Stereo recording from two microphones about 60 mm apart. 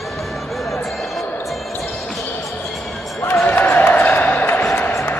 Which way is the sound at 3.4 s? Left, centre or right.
Left.